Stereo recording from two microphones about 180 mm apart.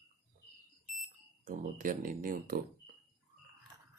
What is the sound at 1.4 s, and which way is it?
Speech, 50° right (ahead or behind).